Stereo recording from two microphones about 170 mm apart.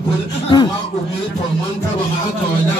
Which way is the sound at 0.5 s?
30° left (ahead or behind).